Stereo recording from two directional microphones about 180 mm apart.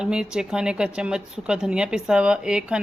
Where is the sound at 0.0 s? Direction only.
5° right (ahead or behind).